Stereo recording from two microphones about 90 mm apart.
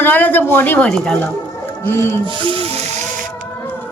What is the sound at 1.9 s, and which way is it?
Speech, 30° left (ahead or behind).